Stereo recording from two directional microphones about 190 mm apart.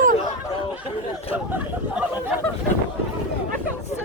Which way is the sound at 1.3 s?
10° right (ahead or behind).